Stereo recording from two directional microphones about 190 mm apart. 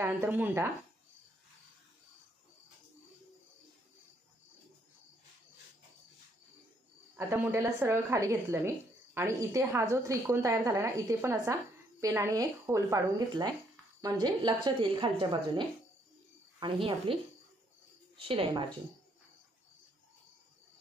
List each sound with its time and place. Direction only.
0.0 s speech: 10° right (ahead or behind)
7.2 s a woman's voice: 15° right (ahead or behind)
18.2 s a woman's voice: 30° right (ahead or behind)